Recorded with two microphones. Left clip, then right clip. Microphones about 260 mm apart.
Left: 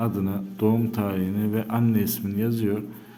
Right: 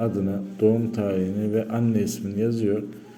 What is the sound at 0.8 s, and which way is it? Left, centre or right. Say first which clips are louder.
A man's voice: right 2 dB; centre.